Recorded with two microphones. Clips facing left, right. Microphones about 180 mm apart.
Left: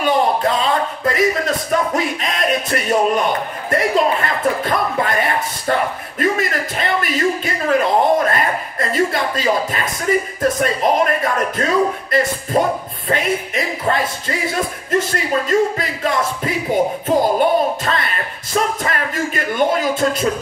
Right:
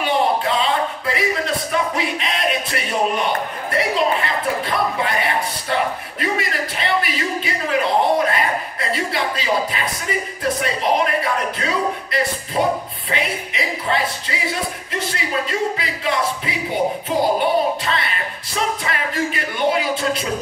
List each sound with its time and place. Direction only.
0.0 s a sound: 45° left (ahead or behind)
2.0 s music: 45° left (ahead or behind)
3.7 s a man's voice: 45° left (ahead or behind)
10.6 s music: 45° left (ahead or behind)